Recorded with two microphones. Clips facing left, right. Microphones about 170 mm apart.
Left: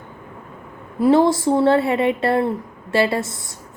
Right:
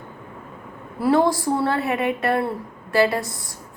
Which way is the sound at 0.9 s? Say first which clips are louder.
Left 4 dB; 20° left (ahead or behind).